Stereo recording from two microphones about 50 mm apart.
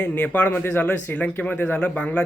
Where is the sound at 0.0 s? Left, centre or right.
Left.